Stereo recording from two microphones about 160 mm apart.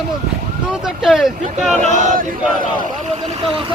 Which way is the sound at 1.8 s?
50° right (ahead or behind).